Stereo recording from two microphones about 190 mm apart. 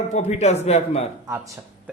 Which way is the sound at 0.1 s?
35° left (ahead or behind).